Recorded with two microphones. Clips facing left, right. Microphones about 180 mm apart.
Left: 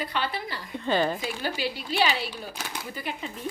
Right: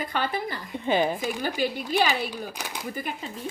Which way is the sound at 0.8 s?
15° right (ahead or behind).